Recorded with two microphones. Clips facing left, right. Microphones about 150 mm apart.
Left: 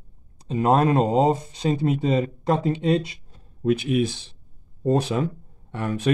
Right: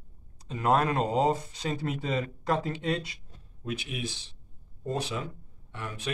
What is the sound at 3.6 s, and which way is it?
Speech, 50° left (ahead or behind).